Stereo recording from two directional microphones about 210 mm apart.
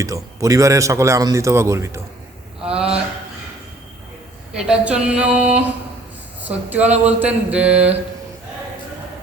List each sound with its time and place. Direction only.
0.0 s a man's voice: 15° right (ahead or behind)
4.5 s a man's voice: 5° right (ahead or behind)